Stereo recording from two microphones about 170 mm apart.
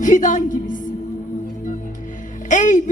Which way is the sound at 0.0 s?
50° left (ahead or behind).